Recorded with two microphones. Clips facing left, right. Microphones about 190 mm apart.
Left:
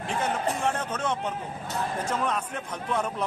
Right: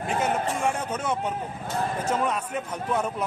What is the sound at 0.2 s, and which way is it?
A man's voice, 10° right (ahead or behind).